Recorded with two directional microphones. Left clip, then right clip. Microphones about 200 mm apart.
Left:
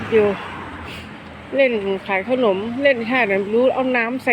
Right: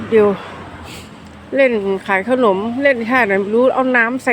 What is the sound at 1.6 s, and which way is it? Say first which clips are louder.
Speech: right 3 dB; 25° right (ahead or behind).